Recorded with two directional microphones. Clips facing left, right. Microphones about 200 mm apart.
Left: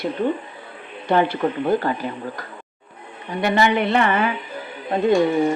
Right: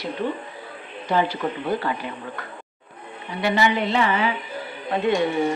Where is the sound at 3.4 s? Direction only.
50° left (ahead or behind).